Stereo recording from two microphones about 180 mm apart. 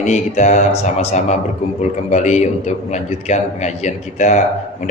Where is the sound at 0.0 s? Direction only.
40° left (ahead or behind).